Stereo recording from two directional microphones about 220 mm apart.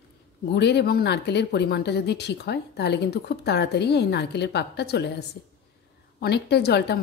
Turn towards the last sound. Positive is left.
turn(degrees=50)  # may be behind; listen again after turning